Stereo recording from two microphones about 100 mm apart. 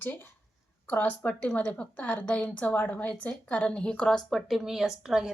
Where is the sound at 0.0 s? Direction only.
20° left (ahead or behind).